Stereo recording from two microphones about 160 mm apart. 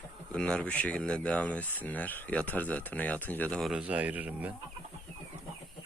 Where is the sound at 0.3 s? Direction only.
5° left (ahead or behind); by 4.5 s 10° right (ahead or behind).